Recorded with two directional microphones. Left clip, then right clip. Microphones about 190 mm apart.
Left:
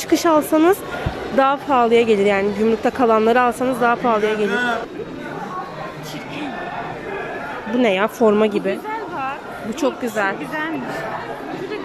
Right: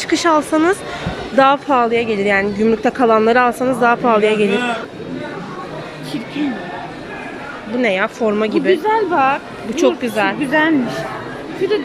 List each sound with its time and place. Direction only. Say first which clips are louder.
0.1 s speech: right 1 dB; 5° left (ahead or behind)
1.9 s speech: left 1 dB; 15° left (ahead or behind); by 4.5 s centre (ahead or behind)
4.5 s a man's voice: right 2 dB; 15° right (ahead or behind)
7.8 s speech: even; 10° left (ahead or behind)
8.8 s a woman's voice: right 11 dB; 45° right (ahead or behind)
9.8 s speech: right 5 dB; 5° left (ahead or behind)